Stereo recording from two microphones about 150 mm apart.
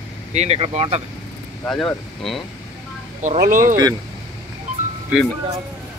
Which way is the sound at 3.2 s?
55° right (ahead or behind).